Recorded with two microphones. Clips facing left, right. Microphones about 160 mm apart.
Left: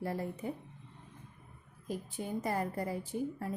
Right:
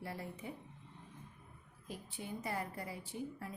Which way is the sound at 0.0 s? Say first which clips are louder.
Left 8 dB; 45° left (ahead or behind).